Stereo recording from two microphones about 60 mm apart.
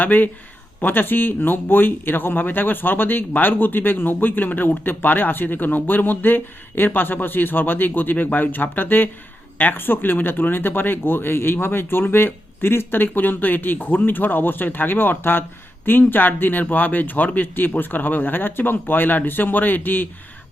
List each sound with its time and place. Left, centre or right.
0.0 s speech: left